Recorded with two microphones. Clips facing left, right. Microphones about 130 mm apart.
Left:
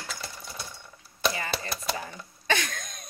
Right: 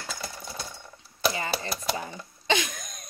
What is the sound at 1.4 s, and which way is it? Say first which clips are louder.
Speech: right 2 dB; 25° right (ahead or behind).